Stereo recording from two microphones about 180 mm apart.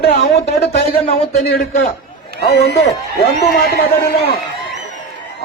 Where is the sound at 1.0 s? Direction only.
35° left (ahead or behind).